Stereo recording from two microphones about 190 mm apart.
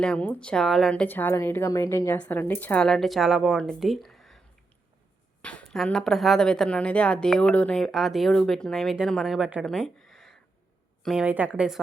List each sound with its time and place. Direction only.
0.0 s a woman's voice: 5° left (ahead or behind)
5.4 s a woman's voice: 5° left (ahead or behind)